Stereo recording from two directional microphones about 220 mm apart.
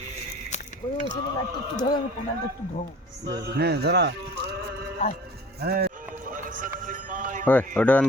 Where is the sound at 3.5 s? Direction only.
45° right (ahead or behind).